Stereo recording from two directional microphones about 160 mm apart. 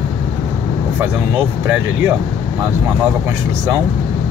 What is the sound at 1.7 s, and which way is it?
Speech, 10° right (ahead or behind).